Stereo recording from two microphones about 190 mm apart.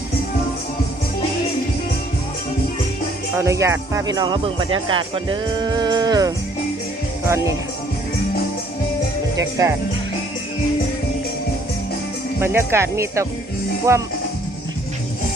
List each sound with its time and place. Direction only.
3.3 s speech: 15° right (ahead or behind)
9.4 s speech: 15° right (ahead or behind)
12.4 s speech: 10° right (ahead or behind)